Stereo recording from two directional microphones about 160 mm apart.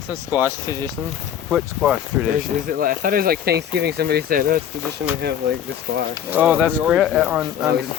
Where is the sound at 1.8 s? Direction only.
5° right (ahead or behind).